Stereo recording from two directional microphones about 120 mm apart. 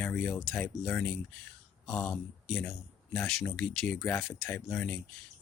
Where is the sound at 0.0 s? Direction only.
10° left (ahead or behind).